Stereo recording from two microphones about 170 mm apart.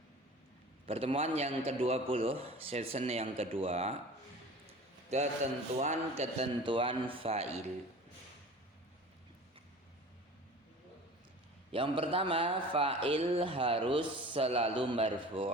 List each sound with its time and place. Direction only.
0.9 s speech: 35° right (ahead or behind)
4.6 s basketball bounce: 40° right (ahead or behind)
5.8 s speech: 40° right (ahead or behind)
11.7 s speech: 30° right (ahead or behind)